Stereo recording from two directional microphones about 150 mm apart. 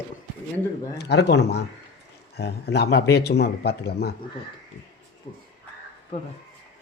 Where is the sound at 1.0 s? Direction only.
90° left.